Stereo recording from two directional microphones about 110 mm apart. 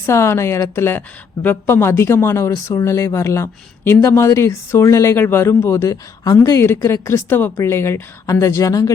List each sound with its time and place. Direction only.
0.0 s speech: 25° left (ahead or behind)